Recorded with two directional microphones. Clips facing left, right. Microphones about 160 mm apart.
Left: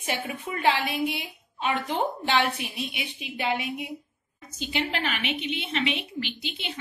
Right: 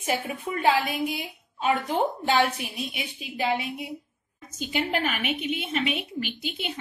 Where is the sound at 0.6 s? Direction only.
40° right (ahead or behind).